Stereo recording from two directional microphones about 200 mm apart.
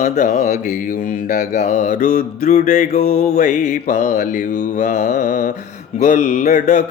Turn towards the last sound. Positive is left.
turn(degrees=35)  # may be behind; listen again after turning